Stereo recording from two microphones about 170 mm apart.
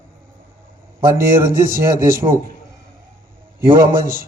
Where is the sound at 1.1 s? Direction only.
55° right (ahead or behind).